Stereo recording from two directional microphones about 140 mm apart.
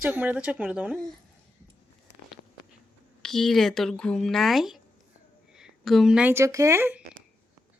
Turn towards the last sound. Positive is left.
turn(degrees=-15)  # may be behind; listen again after turning